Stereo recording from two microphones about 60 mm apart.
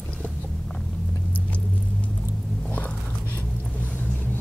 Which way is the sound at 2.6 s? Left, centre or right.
Left.